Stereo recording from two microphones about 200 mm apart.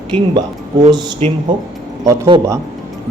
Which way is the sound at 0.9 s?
25° right (ahead or behind).